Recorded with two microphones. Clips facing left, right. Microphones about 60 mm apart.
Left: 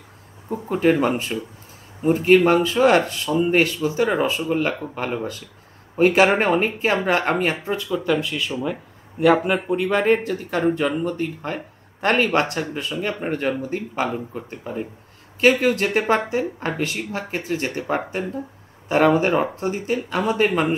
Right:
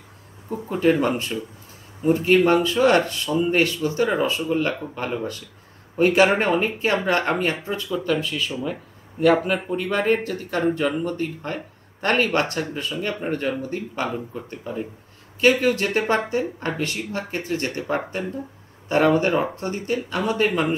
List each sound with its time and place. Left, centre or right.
0.5 s speech: centre
4.2 s speech: centre